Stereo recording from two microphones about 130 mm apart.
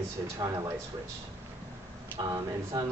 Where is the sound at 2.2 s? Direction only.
30° right (ahead or behind).